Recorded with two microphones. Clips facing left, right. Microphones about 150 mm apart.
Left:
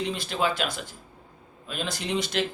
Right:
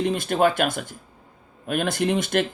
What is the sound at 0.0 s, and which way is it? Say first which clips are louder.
Speech: right 7 dB; 50° right (ahead or behind).